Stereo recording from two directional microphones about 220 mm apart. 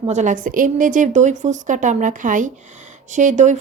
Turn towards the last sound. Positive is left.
turn(degrees=-35)  # may be behind; listen again after turning